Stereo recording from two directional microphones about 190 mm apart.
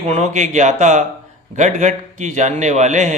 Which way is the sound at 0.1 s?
35° right (ahead or behind).